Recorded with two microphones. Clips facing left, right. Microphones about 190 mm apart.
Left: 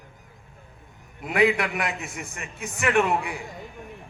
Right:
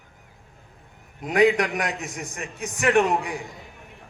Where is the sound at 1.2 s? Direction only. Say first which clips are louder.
Right 3 dB; 40° right (ahead or behind).